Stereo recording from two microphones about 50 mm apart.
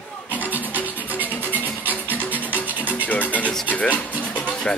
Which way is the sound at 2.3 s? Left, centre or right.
Right.